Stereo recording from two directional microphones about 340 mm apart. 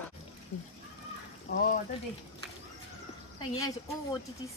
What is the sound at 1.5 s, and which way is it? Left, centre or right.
Speech, left.